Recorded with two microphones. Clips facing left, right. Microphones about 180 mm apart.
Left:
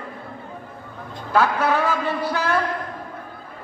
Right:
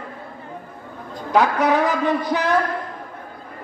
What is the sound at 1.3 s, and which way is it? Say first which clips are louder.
A man's voice: right 2 dB; 15° right (ahead or behind).